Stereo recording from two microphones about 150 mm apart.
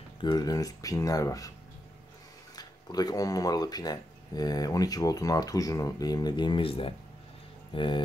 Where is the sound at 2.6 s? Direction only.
25° left (ahead or behind).